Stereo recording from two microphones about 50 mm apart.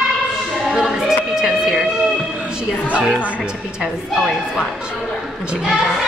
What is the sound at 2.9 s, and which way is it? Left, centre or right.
Speech, right.